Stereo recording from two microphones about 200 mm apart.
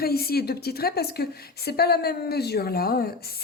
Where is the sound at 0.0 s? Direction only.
50° left (ahead or behind).